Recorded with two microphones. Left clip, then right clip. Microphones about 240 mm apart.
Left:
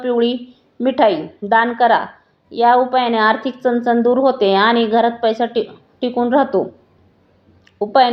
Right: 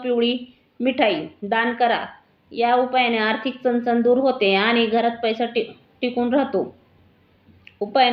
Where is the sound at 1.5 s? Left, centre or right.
Centre.